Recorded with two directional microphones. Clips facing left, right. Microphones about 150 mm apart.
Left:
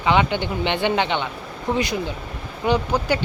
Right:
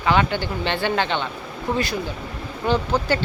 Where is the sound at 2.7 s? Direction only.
15° left (ahead or behind).